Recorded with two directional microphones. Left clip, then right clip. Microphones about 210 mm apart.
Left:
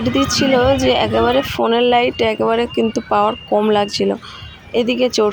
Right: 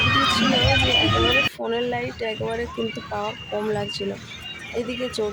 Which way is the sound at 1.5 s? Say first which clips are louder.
Left 12 dB; 30° left (ahead or behind).